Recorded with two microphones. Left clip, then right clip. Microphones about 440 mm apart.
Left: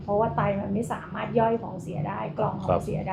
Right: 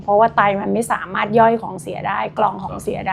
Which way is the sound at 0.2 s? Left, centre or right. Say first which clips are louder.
Right 11 dB; right.